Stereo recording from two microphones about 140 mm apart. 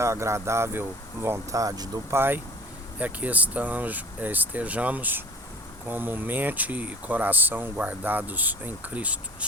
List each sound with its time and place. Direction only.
0.0 s speech: 20° right (ahead or behind)
2.1 s speech: 15° right (ahead or behind)